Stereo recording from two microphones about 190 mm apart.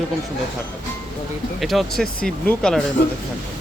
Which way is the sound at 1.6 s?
Centre (ahead or behind).